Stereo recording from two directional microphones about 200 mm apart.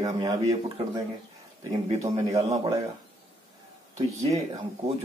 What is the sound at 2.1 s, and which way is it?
Speech, 30° right (ahead or behind).